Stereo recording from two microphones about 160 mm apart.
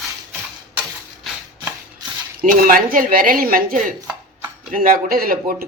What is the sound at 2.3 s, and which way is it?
Speech, 60° right (ahead or behind).